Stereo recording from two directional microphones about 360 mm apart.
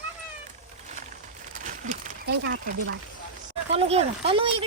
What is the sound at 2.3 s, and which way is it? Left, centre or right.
Speech, right.